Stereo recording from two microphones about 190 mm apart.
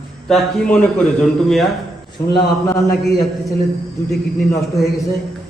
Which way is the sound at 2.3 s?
20° left (ahead or behind).